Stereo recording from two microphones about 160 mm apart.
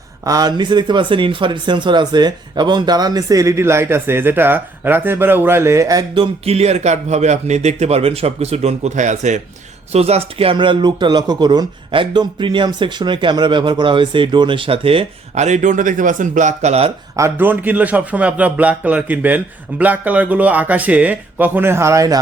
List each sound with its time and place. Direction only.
0.3 s speech: 25° right (ahead or behind); by 16.9 s 45° right (ahead or behind)
17.2 s speech: 15° right (ahead or behind)